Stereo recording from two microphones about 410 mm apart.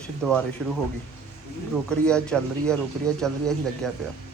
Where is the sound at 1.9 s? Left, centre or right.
Centre.